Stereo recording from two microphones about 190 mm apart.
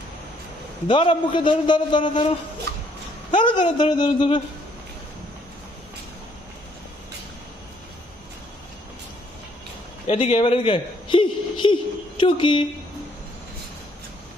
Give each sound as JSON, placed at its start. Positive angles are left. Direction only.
{"t": 0.8, "sound": "a man's voice", "side_deg": 25}
{"t": 10.0, "sound": "a man's voice", "side_deg": 30}